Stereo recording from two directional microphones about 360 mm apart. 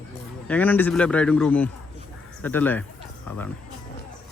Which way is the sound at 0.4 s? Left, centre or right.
Centre.